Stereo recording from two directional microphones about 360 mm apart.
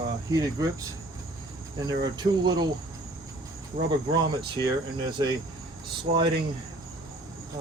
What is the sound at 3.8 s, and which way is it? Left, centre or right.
Speech, centre.